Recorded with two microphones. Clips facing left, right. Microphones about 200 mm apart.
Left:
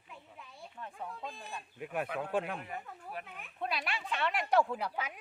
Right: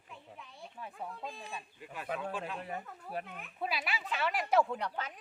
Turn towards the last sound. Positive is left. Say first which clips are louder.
# left 1 dB
turn(degrees=5)  # may be behind; listen again after turning